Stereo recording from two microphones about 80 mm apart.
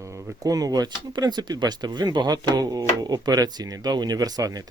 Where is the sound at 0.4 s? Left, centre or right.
Right.